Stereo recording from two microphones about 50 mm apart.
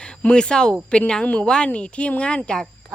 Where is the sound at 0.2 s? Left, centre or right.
Centre.